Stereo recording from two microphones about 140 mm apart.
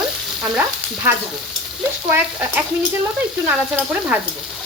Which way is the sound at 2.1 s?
10° right (ahead or behind).